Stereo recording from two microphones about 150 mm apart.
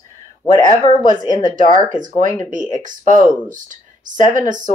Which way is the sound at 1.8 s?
60° right (ahead or behind).